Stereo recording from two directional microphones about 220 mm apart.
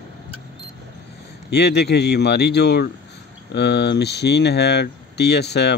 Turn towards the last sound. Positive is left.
turn(degrees=50)  # may be behind; listen again after turning